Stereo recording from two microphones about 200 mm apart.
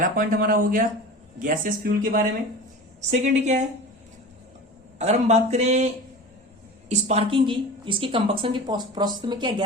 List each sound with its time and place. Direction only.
0.0 s speech: 45° right (ahead or behind)
4.9 s a woman's voice: 35° right (ahead or behind)